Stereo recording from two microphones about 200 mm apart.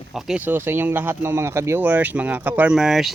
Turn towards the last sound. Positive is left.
turn(degrees=0)  # may be behind; listen again after turning